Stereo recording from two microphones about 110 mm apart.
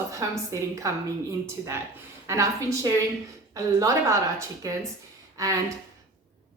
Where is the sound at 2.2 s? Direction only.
30° right (ahead or behind).